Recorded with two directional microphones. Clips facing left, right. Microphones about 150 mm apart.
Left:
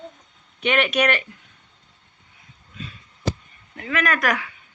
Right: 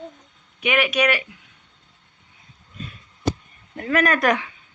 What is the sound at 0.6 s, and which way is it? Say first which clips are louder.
Speech: even; 5° right (ahead or behind).